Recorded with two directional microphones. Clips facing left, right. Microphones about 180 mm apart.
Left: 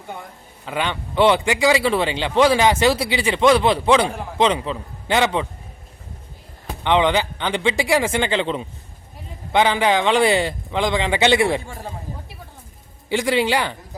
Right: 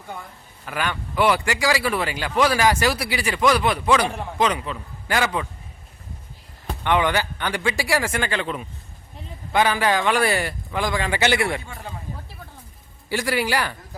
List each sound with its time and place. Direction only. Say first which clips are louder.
0.6 s a man's voice: left 3 dB; 20° left (ahead or behind)
6.8 s a man's voice: left 3 dB; 20° left (ahead or behind)
11.7 s speech: left 3 dB; 40° left (ahead or behind)
13.1 s a man's voice: left 4 dB; 20° left (ahead or behind)